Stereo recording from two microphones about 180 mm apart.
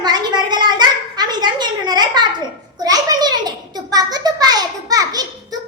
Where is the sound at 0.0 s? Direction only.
25° right (ahead or behind).